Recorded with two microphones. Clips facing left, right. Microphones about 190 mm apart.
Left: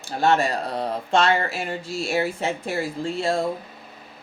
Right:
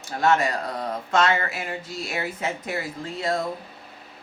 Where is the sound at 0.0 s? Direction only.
30° left (ahead or behind).